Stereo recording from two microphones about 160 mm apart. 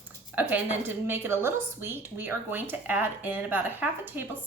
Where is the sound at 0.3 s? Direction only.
10° right (ahead or behind).